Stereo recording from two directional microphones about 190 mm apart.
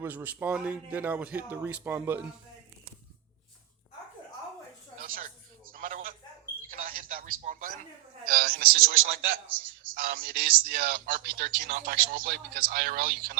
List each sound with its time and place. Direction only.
0.0 s a man's voice: 10° right (ahead or behind)
5.0 s a sound: 50° right (ahead or behind)
8.3 s speech: 50° right (ahead or behind)